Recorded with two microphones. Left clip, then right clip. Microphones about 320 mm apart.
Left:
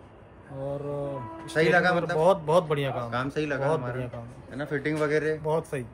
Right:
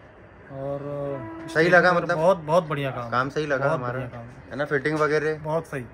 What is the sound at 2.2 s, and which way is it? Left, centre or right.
Speech, centre.